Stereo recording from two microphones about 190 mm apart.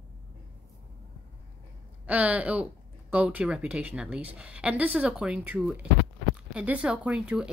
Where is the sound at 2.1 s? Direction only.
10° right (ahead or behind).